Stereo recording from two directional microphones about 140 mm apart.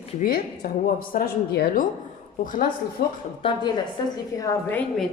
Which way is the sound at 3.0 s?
90° left.